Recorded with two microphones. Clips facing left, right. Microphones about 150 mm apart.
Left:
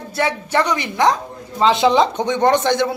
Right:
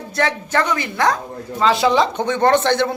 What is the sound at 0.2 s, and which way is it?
Speech, 15° left (ahead or behind).